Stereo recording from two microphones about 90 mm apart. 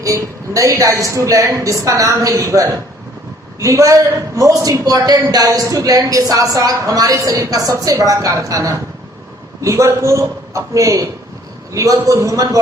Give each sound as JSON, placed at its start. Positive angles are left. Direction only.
{"t": 0.0, "sound": "speech", "side_deg": -40}